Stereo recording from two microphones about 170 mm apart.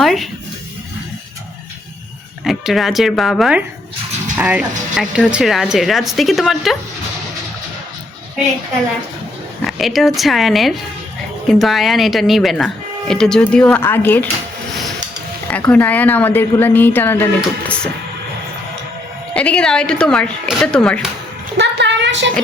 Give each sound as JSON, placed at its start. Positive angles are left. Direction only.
{"t": 0.0, "sound": "music", "side_deg": 0}
{"t": 2.4, "sound": "speech", "side_deg": 0}
{"t": 9.6, "sound": "speech", "side_deg": 0}
{"t": 15.4, "sound": "speech", "side_deg": 10}
{"t": 19.3, "sound": "speech", "side_deg": 5}
{"t": 21.6, "sound": "a sound", "side_deg": -90}